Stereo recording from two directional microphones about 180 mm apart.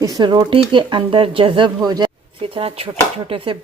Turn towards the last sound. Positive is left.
turn(degrees=-30)  # may be behind; listen again after turning